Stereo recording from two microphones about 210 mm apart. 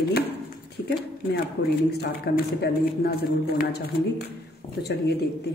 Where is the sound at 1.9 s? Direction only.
50° left (ahead or behind).